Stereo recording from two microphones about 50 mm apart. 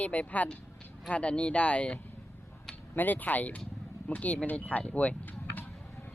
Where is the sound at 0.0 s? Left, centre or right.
Left.